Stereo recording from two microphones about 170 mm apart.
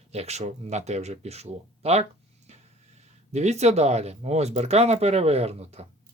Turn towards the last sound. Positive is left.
turn(degrees=-35)  # may be behind; listen again after turning